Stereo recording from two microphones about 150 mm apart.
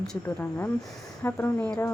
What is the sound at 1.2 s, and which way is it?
Speech, 15° left (ahead or behind).